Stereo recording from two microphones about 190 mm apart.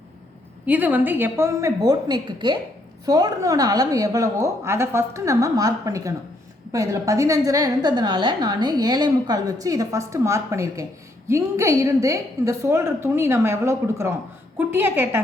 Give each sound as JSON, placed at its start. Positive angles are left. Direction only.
{"t": 0.6, "sound": "a woman's voice", "side_deg": -10}